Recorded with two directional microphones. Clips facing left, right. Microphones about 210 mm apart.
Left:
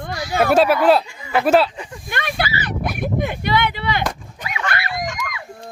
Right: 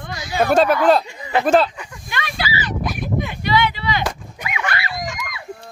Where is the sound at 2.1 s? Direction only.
55° left (ahead or behind).